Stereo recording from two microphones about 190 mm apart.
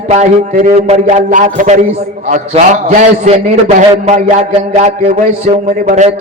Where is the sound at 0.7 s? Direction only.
35° right (ahead or behind).